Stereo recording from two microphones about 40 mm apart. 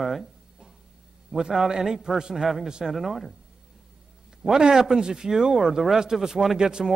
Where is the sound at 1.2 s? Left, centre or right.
Centre.